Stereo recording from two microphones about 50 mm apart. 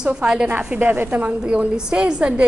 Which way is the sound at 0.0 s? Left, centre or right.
Centre.